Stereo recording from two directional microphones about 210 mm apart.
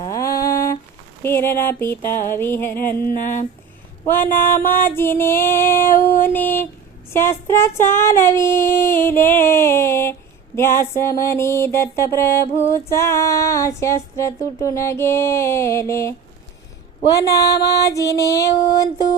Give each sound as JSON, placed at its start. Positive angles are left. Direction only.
{"t": 0.0, "sound": "a sound", "side_deg": 15}
{"t": 1.2, "sound": "female singing", "side_deg": 10}
{"t": 3.1, "sound": "a sound", "side_deg": 40}
{"t": 4.0, "sound": "mantra", "side_deg": 10}
{"t": 4.3, "sound": "mantra", "side_deg": 45}
{"t": 4.9, "sound": "female singing", "side_deg": 10}
{"t": 17.2, "sound": "female singing", "side_deg": 15}